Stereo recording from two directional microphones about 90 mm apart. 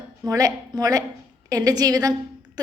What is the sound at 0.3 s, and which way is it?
A woman's voice, 45° right (ahead or behind).